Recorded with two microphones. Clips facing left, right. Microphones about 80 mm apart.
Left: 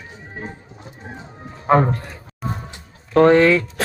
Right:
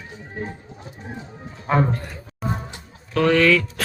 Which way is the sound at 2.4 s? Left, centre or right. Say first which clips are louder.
Right 1 dB; centre.